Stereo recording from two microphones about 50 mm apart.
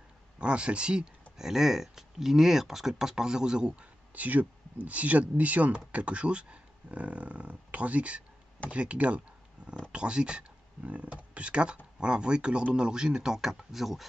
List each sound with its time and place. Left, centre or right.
0.4 s speech: right
1.4 s speech: centre
4.1 s speech: right; by 14.0 s centre